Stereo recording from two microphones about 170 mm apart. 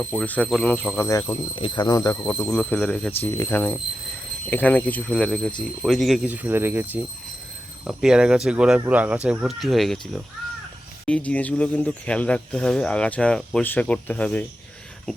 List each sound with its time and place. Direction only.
0.1 s speech: 5° left (ahead or behind)
1.5 s speech: 30° left (ahead or behind)
2.2 s speech: 10° left (ahead or behind)